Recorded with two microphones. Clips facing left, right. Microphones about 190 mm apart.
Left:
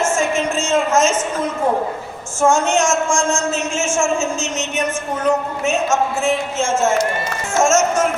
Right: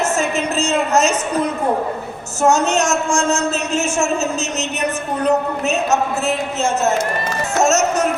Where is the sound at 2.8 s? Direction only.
65° right (ahead or behind).